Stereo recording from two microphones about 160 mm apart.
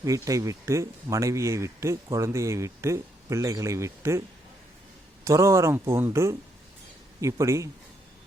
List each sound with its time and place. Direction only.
0.0 s speech: 20° right (ahead or behind)
5.2 s speech: 20° right (ahead or behind)